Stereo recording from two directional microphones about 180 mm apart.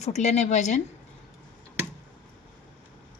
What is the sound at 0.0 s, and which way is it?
Speech, 40° left (ahead or behind).